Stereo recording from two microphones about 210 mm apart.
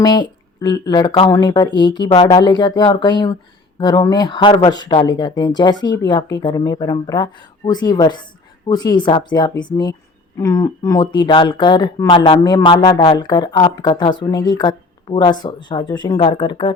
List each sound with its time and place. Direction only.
0.0 s speech: 20° left (ahead or behind)